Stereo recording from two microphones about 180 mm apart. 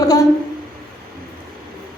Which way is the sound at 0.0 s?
20° left (ahead or behind).